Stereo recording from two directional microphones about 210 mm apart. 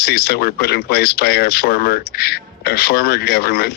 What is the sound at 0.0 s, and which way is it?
Speech, 50° left (ahead or behind).